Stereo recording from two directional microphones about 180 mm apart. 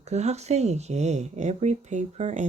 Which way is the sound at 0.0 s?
35° right (ahead or behind).